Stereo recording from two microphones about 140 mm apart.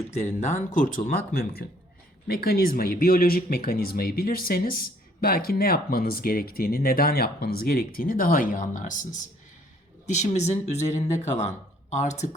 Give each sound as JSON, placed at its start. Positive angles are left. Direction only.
{"t": 0.1, "sound": "speech", "side_deg": 55}
{"t": 10.1, "sound": "speech", "side_deg": 55}